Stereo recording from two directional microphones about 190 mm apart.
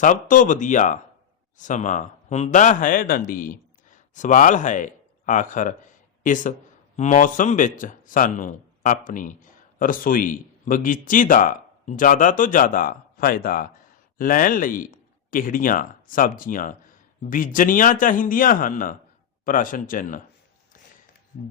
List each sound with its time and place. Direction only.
0.0 s a man's voice: 45° left (ahead or behind)